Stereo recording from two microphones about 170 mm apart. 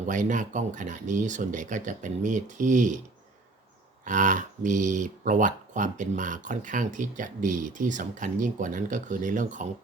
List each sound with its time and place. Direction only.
0.0 s speech: 50° right (ahead or behind)
4.0 s speech: 50° right (ahead or behind)